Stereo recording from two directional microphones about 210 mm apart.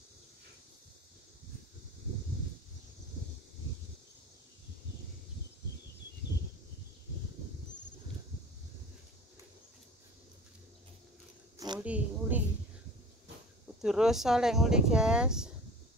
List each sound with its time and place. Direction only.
11.5 s a sound: 20° right (ahead or behind)
11.8 s a woman's voice: 5° right (ahead or behind)
13.7 s speech: centre (ahead or behind)